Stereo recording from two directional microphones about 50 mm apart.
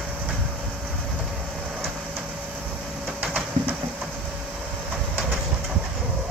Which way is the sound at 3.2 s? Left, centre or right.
Right.